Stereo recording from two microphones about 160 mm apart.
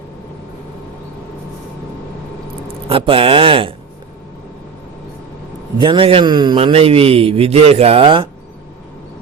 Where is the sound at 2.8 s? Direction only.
35° right (ahead or behind).